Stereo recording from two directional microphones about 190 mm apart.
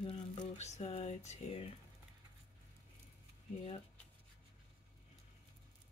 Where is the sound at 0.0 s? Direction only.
30° left (ahead or behind).